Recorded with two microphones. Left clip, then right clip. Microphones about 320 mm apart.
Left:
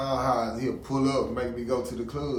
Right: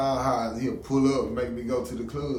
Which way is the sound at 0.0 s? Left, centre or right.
Centre.